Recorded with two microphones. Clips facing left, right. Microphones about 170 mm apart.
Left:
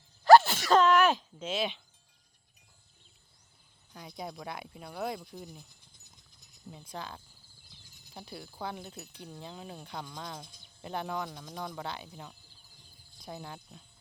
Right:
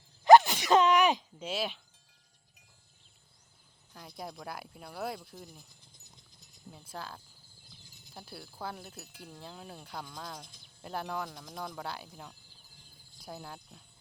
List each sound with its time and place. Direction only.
0.3 s sneeze: 15° right (ahead or behind)
3.9 s speech: centre (ahead or behind)
6.7 s speech: centre (ahead or behind)